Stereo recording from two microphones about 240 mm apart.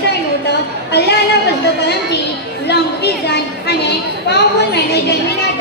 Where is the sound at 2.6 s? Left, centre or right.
Left.